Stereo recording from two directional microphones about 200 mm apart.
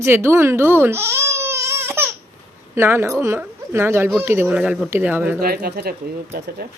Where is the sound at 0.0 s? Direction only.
10° right (ahead or behind).